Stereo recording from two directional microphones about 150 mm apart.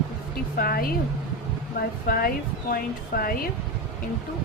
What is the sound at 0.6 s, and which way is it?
Speech, 80° left.